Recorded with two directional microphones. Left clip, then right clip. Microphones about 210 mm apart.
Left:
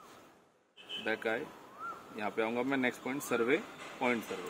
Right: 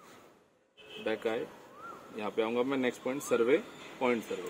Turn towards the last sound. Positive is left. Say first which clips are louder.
# right 2 dB
turn(degrees=10)  # may be behind; listen again after turning